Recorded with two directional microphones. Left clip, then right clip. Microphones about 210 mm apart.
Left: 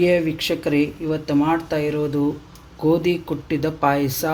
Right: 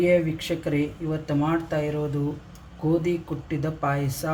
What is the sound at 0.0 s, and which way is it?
Speech, 45° left (ahead or behind).